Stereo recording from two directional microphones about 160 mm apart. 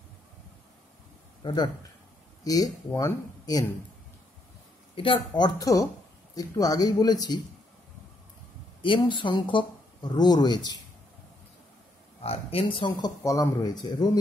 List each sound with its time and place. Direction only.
1.4 s speech: 30° left (ahead or behind)
4.9 s speech: 35° left (ahead or behind)
8.8 s speech: 30° left (ahead or behind)
12.2 s speech: 40° left (ahead or behind)